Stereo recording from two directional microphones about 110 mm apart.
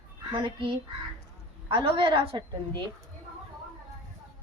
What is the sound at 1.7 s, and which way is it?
Speech, 50° right (ahead or behind).